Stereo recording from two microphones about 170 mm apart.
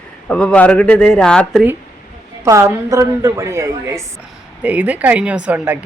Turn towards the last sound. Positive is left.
turn(degrees=-5)  # may be behind; listen again after turning